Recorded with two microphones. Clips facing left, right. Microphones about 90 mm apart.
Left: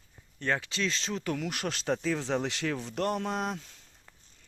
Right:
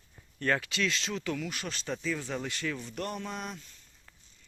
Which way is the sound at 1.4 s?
60° left (ahead or behind).